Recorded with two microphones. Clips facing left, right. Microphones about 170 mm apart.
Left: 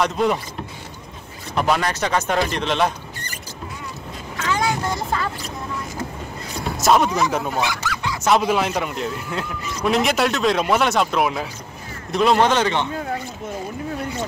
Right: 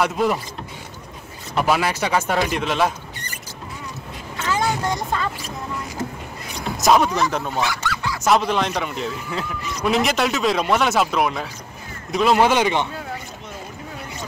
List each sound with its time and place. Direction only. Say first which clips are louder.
0.0 s speech: even; 5° right (ahead or behind)
1.5 s speech: even; 5° right (ahead or behind)
4.5 s vehicle: even; centre (ahead or behind)
6.8 s speech: even; centre (ahead or behind)
7.6 s speech: even; 15° left (ahead or behind)
8.2 s speech: left 1 dB; 5° left (ahead or behind)